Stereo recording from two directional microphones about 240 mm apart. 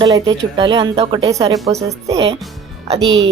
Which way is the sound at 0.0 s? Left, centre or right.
Centre.